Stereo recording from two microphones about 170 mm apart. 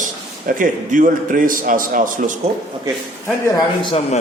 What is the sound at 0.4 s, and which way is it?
A man's voice, 50° right (ahead or behind).